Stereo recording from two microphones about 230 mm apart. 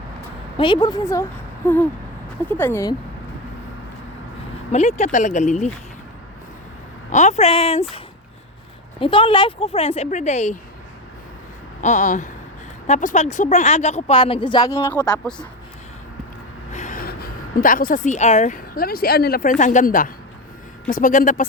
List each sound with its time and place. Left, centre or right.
0.5 s speech: centre
4.7 s speech: left
7.1 s speech: left
9.0 s speech: left
11.8 s speech: left; by 15.4 s centre
16.7 s speech: left